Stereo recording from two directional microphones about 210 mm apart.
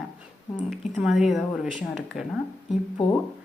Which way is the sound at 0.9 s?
Centre (ahead or behind).